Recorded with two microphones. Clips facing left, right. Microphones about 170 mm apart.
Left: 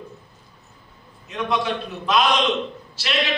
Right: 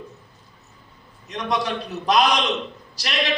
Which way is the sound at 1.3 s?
40° right (ahead or behind).